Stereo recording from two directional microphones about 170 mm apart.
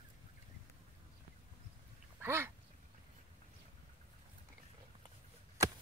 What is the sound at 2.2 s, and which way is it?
Speech, 15° right (ahead or behind).